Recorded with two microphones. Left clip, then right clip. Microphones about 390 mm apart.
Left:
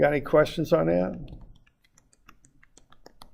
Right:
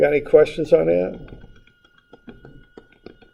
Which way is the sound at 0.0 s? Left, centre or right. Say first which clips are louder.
Right 7 dB; left.